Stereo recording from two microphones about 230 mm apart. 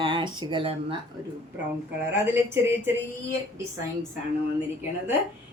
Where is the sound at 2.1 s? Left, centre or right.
Centre.